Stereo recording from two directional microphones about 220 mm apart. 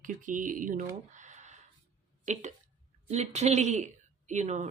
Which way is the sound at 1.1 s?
35° right (ahead or behind).